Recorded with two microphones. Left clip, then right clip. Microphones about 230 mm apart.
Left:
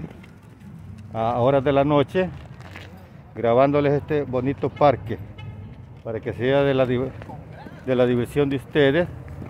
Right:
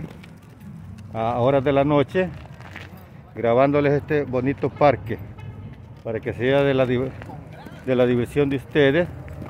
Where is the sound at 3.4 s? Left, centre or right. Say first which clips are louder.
Even; centre.